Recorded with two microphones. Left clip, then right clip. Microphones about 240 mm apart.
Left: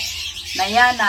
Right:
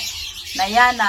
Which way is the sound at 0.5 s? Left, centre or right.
Centre.